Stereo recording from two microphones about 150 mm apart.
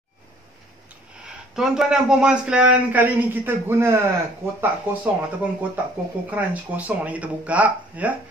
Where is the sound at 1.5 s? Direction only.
5° right (ahead or behind).